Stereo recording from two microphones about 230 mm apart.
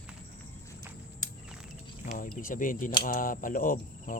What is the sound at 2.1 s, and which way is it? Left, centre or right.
Arrow, left.